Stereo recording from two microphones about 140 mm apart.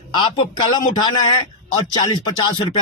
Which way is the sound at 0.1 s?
35° left (ahead or behind).